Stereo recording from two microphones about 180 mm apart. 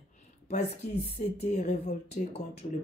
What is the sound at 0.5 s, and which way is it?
A woman's voice, 40° left (ahead or behind).